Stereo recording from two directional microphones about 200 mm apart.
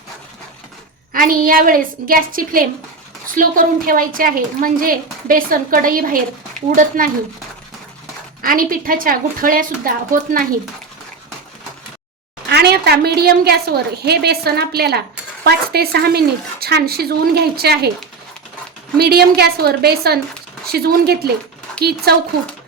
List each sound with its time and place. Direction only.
1.1 s a woman's voice: 45° right (ahead or behind)
8.4 s a woman's voice: 45° right (ahead or behind)
12.5 s a woman's voice: 55° right (ahead or behind)
18.9 s a woman's voice: 55° right (ahead or behind)